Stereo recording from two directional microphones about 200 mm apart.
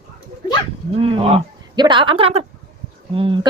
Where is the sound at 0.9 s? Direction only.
30° right (ahead or behind).